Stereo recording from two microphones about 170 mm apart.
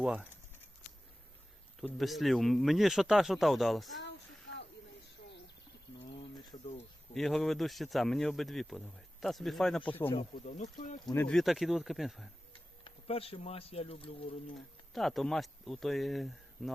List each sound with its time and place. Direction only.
0.0 s speech: 5° right (ahead or behind)
1.8 s speech: centre (ahead or behind)
4.0 s a sound: 90° left
6.5 s a sound: 40° left (ahead or behind)
7.1 s speech: centre (ahead or behind)
10.3 s speech: 45° left (ahead or behind)
11.0 s speech: 15° left (ahead or behind)
11.3 s speech: centre (ahead or behind)
12.8 s speech: 35° left (ahead or behind)
14.5 s speech: centre (ahead or behind)